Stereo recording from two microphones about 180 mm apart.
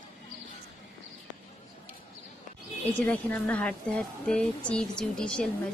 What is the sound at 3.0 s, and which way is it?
Speech, 5° left (ahead or behind).